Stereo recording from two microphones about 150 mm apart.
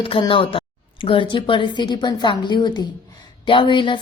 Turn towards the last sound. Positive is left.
turn(degrees=30)  # may be behind; listen again after turning